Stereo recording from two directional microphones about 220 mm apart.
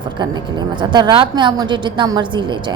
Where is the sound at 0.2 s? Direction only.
20° right (ahead or behind).